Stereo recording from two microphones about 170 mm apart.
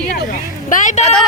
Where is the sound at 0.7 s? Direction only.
50° left (ahead or behind).